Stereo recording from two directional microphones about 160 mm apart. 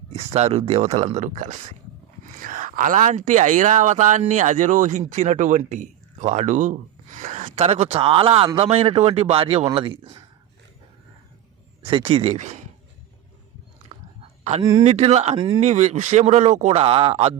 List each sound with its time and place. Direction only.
0.1 s a man's voice: 40° right (ahead or behind)
1.2 s a man's voice: 50° right (ahead or behind); by 10.2 s 35° right (ahead or behind)
11.8 s a man's voice: 35° right (ahead or behind)
14.6 s a man's voice: 25° right (ahead or behind)
14.8 s speech: 40° right (ahead or behind)